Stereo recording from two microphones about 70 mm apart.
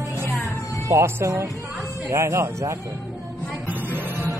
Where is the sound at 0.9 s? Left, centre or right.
Right.